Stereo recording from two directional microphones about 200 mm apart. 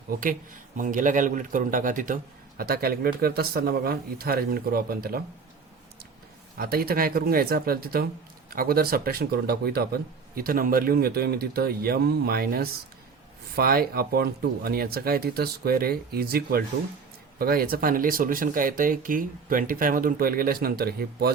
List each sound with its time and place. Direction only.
0.1 s a man's voice: 45° right (ahead or behind)
6.6 s speech: 50° right (ahead or behind)